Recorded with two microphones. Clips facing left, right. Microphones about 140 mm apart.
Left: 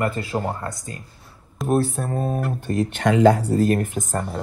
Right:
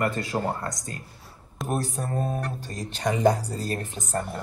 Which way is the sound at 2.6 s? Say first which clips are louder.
Left 10 dB; 65° left (ahead or behind).